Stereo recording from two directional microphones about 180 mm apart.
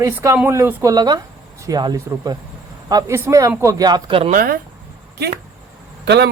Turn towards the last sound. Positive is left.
turn(degrees=-70)  # may be behind; listen again after turning